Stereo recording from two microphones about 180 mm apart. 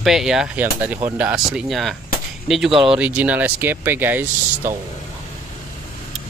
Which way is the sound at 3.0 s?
10° right (ahead or behind).